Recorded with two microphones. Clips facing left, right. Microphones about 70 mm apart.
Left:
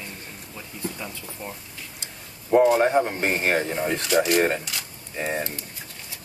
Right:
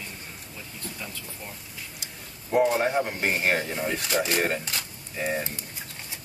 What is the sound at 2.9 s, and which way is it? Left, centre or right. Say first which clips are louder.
Speech: left 4 dB; left.